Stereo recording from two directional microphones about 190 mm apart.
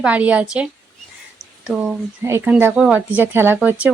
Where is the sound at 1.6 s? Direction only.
5° right (ahead or behind).